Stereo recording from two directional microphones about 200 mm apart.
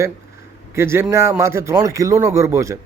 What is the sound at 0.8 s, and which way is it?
Speech, 10° right (ahead or behind).